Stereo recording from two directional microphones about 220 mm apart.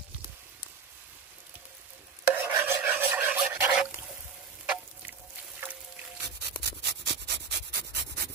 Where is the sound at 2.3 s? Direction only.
10° right (ahead or behind).